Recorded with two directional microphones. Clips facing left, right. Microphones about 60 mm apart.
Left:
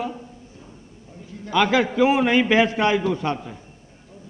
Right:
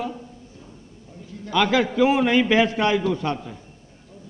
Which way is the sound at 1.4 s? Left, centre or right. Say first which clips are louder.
Left 1 dB; left.